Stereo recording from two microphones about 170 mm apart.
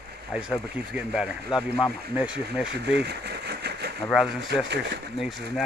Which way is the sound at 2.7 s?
80° right.